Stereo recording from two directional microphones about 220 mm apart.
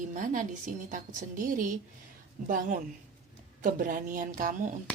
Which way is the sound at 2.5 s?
40° right (ahead or behind).